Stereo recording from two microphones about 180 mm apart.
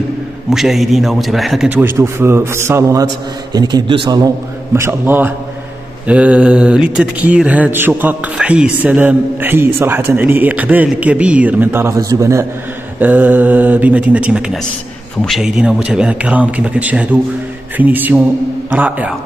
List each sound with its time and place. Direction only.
0.5 s mantra: centre (ahead or behind)
3.5 s a man's voice: 25° right (ahead or behind)
4.7 s mantra: 15° right (ahead or behind)